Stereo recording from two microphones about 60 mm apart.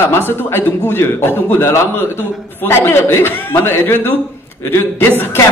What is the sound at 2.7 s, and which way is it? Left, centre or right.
A man's voice, left.